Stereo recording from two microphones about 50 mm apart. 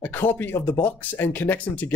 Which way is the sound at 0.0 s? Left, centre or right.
Left.